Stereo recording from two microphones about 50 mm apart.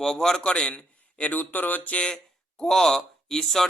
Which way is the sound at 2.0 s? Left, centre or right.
Centre.